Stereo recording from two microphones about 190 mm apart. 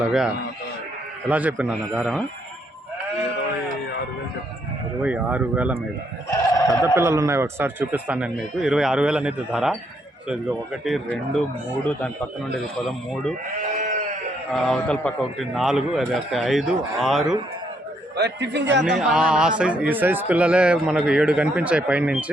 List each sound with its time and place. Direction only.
0.0 s a man's voice: 5° right (ahead or behind)
5.0 s a man's voice: 5° right (ahead or behind)
6.5 s sheep: 15° left (ahead or behind)
6.8 s a man's voice: 15° right (ahead or behind)
10.8 s a man's voice: centre (ahead or behind)
14.5 s a man's voice: 5° left (ahead or behind)
18.2 s speech: 60° right (ahead or behind)
18.9 s a man's voice: 5° right (ahead or behind)